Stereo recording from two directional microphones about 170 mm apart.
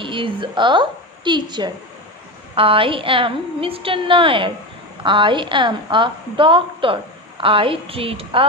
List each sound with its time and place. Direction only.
0.0 s a woman's voice: 30° right (ahead or behind)